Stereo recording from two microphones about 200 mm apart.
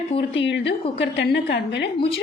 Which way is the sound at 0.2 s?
65° left (ahead or behind).